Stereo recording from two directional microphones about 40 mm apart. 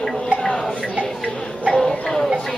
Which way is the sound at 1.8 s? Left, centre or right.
Centre.